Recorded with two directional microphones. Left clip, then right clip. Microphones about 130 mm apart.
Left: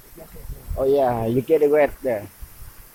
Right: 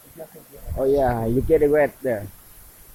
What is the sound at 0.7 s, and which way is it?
Speech, 20° right (ahead or behind).